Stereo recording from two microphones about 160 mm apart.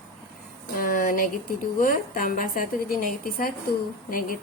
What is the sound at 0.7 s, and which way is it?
Speech, 60° left (ahead or behind).